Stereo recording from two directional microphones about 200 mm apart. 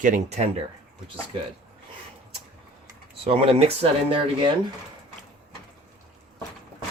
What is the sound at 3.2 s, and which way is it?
Speech, 30° right (ahead or behind).